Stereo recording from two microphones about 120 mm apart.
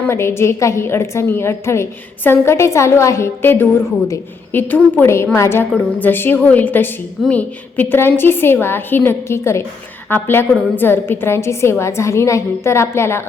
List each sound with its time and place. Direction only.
0.0 s a woman's voice: 20° left (ahead or behind)